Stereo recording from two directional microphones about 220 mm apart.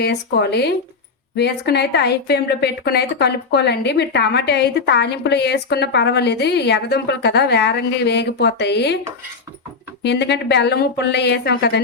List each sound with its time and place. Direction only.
0.0 s a woman's voice: 50° left (ahead or behind)
10.0 s a woman's voice: 50° left (ahead or behind)